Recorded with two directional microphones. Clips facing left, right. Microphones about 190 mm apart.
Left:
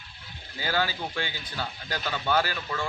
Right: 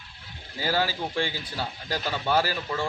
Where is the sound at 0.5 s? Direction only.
30° right (ahead or behind).